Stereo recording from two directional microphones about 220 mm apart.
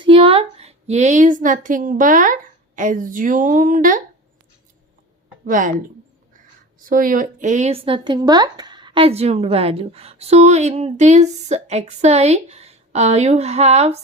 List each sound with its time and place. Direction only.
0.0 s a woman's voice: 25° right (ahead or behind)
5.5 s speech: 35° right (ahead or behind)
6.7 s a woman's voice: 40° right (ahead or behind)